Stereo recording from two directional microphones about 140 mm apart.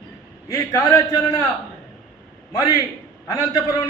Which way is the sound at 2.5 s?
25° left (ahead or behind).